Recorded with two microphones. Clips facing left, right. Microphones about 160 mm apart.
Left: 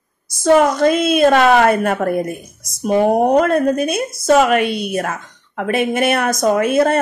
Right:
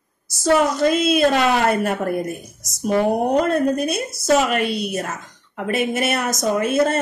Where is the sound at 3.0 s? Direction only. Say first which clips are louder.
Left 5 dB; 50° left (ahead or behind).